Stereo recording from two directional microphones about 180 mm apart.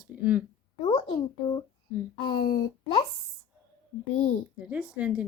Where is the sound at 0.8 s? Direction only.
30° left (ahead or behind).